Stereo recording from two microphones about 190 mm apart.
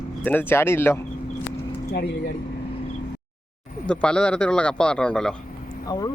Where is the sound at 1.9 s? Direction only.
60° left (ahead or behind).